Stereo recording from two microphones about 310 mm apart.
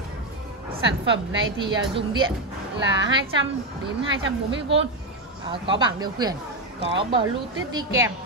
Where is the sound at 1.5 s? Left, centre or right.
Centre.